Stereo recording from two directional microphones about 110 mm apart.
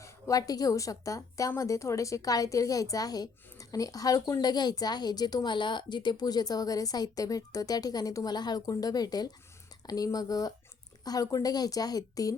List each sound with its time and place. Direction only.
0.0 s a woman's voice: 30° left (ahead or behind)